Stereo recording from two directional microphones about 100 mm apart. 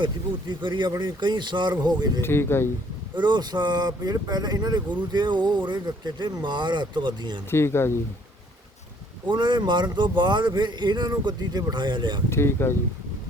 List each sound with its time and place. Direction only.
0.0 s speech: 55° right (ahead or behind)
2.2 s speech: 25° left (ahead or behind)
3.2 s speech: 45° right (ahead or behind)
7.5 s speech: 25° left (ahead or behind)
9.2 s speech: 50° right (ahead or behind)
12.3 s speech: 25° left (ahead or behind)